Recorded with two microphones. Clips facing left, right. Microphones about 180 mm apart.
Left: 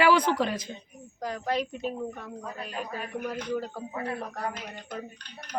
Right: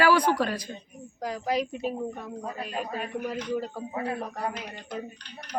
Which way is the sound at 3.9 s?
25° right (ahead or behind).